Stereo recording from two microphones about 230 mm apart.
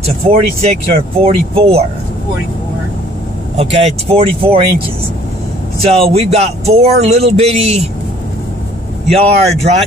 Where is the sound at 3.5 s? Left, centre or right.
Right.